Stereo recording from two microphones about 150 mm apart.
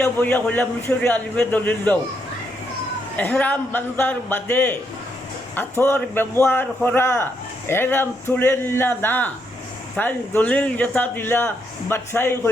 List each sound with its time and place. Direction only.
0.0 s a man's voice: 10° left (ahead or behind)
3.2 s a man's voice: 10° left (ahead or behind)